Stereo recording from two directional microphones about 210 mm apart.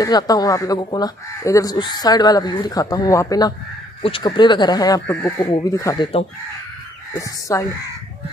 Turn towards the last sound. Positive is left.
turn(degrees=15)  # may be behind; listen again after turning